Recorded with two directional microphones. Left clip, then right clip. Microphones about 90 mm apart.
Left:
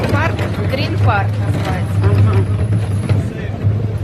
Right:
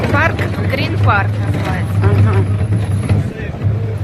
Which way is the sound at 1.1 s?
30° left (ahead or behind).